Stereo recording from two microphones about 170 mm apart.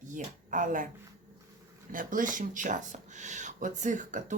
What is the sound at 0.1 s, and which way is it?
Speech, 50° right (ahead or behind).